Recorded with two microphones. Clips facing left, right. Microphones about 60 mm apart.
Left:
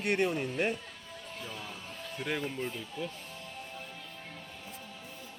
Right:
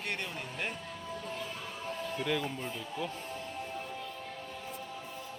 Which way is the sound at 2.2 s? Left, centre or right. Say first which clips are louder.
Right 1 dB; centre.